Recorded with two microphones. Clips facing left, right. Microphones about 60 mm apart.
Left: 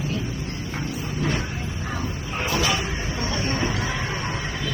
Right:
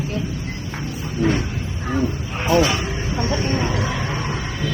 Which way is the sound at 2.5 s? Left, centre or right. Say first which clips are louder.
Right 7 dB; right.